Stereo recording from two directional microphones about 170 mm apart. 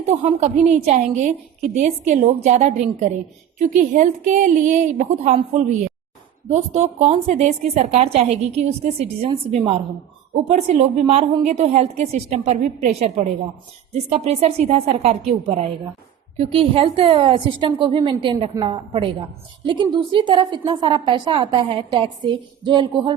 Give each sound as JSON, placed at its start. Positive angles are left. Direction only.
{"t": 0.0, "sound": "a woman's voice", "side_deg": -40}